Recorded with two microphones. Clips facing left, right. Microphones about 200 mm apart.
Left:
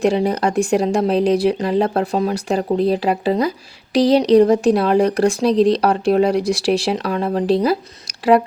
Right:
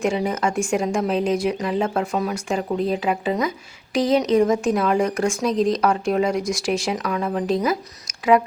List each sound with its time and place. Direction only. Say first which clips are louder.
0.3 s speech: left 5 dB; 35° left (ahead or behind)